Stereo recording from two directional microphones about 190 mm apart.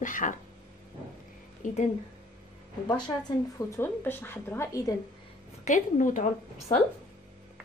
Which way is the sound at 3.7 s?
10° left (ahead or behind).